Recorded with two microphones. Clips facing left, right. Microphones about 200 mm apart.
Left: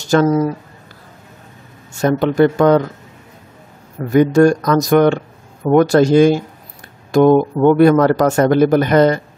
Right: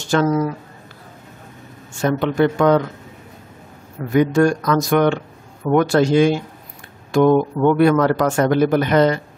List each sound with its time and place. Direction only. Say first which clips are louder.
0.0 s speech: left 4 dB; 40° left (ahead or behind)
2.0 s speech: left 4 dB; 40° left (ahead or behind)
4.1 s a man's voice: left 4 dB; 40° left (ahead or behind)